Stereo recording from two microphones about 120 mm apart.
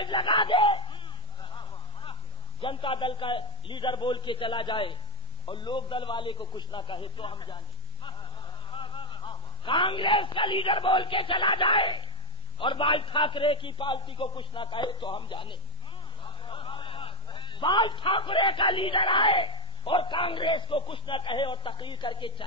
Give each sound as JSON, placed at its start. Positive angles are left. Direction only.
{"t": 0.0, "sound": "a sound", "side_deg": 45}
{"t": 2.6, "sound": "a man's voice", "side_deg": 45}
{"t": 8.7, "sound": "a man's voice", "side_deg": 45}